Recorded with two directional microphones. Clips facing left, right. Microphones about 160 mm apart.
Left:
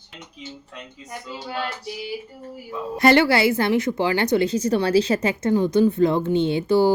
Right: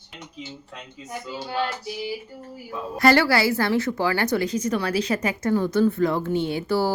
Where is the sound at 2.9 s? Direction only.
20° left (ahead or behind).